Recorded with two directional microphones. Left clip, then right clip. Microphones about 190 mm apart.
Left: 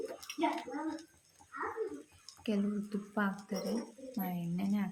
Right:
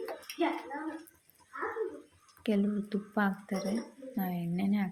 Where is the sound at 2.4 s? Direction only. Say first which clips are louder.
Right 5 dB; 20° right (ahead or behind).